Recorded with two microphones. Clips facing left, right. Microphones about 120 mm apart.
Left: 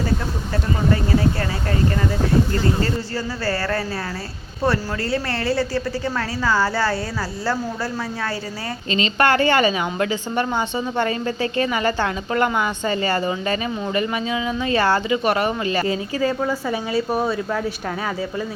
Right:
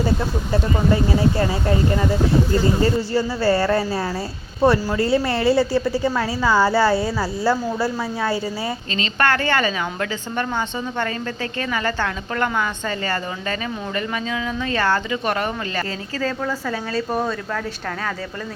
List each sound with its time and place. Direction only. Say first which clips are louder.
0.5 s speech: right 2 dB; 15° right (ahead or behind)
8.9 s speech: left 4 dB; 20° left (ahead or behind)
11.5 s speech: left 2 dB; 20° left (ahead or behind)